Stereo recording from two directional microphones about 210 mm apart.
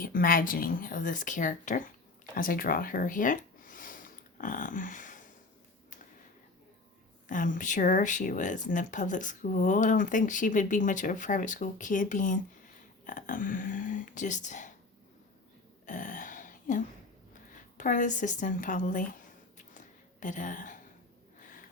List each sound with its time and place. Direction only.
0.0 s speech: 40° left (ahead or behind)
2.3 s a sound: 40° left (ahead or behind)
7.3 s speech: 40° left (ahead or behind)
15.9 s throat clearing: 35° left (ahead or behind)
17.5 s speech: 40° left (ahead or behind)
19.5 s a sound: 35° left (ahead or behind)